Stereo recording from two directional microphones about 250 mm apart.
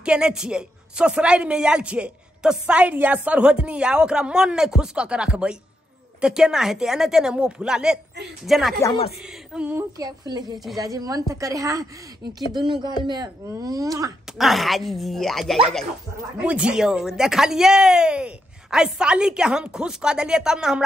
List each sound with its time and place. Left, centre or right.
0.0 s a man's voice: centre
8.8 s speech: left
9.5 s speech: centre
14.4 s a man's voice: centre